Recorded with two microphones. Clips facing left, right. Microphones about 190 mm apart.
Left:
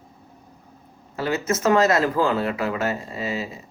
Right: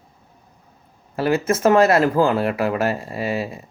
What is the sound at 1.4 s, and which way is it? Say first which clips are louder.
Speech: right 3 dB; 30° right (ahead or behind).